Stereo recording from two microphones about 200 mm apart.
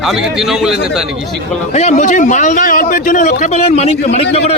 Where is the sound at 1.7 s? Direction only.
35° left (ahead or behind).